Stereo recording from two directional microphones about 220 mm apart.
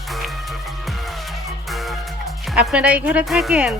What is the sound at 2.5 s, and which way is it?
Speech, 5° right (ahead or behind).